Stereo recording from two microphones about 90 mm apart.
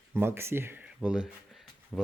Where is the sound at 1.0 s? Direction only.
15° right (ahead or behind).